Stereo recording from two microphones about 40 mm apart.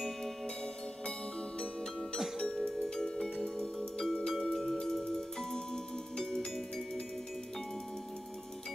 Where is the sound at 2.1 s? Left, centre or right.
Centre.